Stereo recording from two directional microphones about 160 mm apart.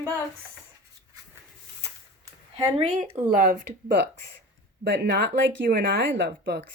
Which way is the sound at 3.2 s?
55° right (ahead or behind).